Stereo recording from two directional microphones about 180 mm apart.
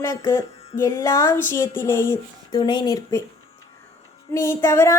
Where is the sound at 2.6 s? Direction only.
25° left (ahead or behind).